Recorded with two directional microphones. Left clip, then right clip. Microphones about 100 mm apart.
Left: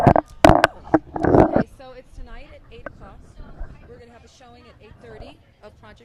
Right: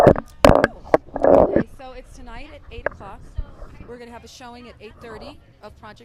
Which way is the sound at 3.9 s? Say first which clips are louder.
Right 11 dB; 85° right.